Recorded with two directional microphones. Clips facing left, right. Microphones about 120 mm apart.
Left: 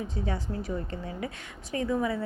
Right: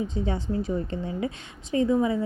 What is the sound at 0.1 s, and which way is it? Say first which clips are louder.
A woman's voice: right 5 dB; 25° right (ahead or behind).